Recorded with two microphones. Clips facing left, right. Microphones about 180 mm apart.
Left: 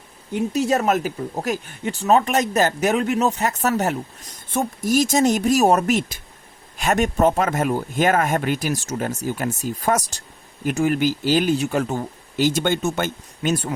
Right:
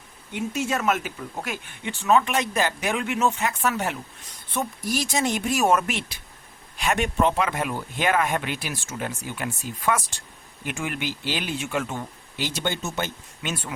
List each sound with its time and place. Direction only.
0.3 s speech: 40° left (ahead or behind)